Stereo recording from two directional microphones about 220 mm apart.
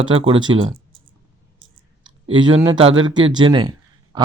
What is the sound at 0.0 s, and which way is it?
Speech, 25° right (ahead or behind).